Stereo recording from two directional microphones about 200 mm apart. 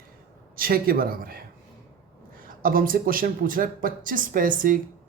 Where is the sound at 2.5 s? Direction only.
45° right (ahead or behind).